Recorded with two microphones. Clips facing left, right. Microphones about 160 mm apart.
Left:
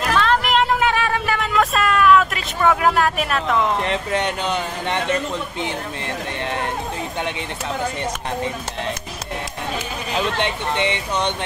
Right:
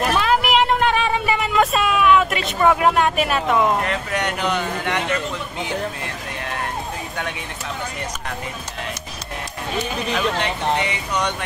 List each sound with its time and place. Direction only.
0.1 s music: 5° right (ahead or behind)
3.8 s speech: 30° left (ahead or behind)
10.1 s speech: 25° left (ahead or behind)